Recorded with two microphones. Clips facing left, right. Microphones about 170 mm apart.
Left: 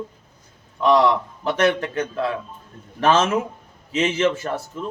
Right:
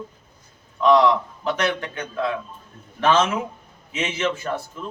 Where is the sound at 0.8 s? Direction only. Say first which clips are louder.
Even; 35° left (ahead or behind).